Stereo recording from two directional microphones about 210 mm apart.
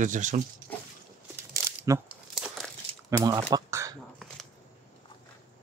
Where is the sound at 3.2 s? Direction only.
15° right (ahead or behind).